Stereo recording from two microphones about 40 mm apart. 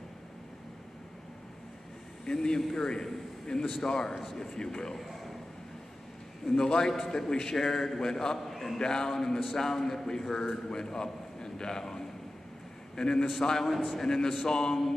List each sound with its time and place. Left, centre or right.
2.2 s a man's voice: centre
4.9 s a sound: centre
6.4 s a man's voice: centre
8.7 s a man's voice: centre
13.7 s a man's voice: centre
14.0 s a man's voice: centre